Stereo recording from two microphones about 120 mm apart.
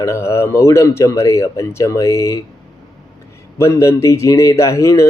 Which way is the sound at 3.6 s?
25° left (ahead or behind).